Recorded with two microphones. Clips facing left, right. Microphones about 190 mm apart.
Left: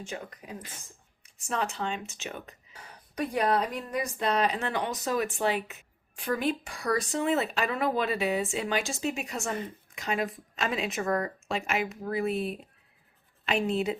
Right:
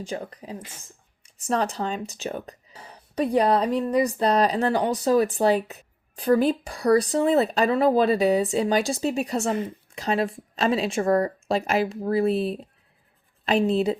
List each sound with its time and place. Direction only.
0.0 s speech: 30° right (ahead or behind)